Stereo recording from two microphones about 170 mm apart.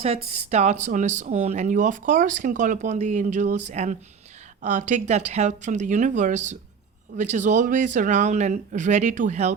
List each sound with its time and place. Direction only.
0.0 s speech: 40° right (ahead or behind)